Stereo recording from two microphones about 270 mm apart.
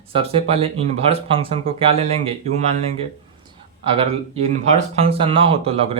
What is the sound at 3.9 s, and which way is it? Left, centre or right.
Speech, right.